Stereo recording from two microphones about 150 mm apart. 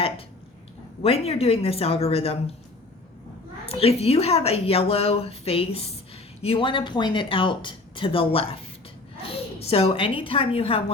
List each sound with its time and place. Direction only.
1.0 s speech: 40° left (ahead or behind)
3.7 s a woman's voice: 40° left (ahead or behind)